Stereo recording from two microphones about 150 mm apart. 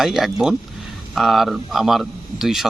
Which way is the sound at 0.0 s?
Centre (ahead or behind).